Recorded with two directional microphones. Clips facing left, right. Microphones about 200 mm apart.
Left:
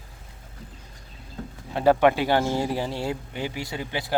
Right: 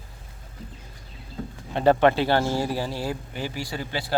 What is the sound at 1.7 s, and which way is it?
Speech, 10° left (ahead or behind).